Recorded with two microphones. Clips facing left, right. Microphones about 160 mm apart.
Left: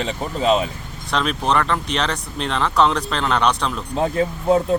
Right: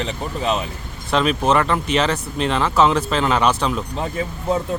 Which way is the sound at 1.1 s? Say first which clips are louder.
Right 3 dB; 5° right (ahead or behind).